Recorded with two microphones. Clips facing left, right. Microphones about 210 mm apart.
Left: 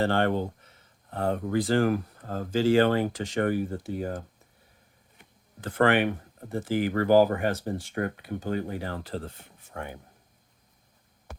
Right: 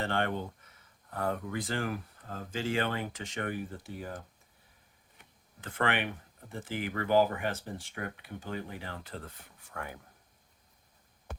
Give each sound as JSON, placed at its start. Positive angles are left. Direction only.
{"t": 0.0, "sound": "speech", "side_deg": 35}
{"t": 5.5, "sound": "speech", "side_deg": 35}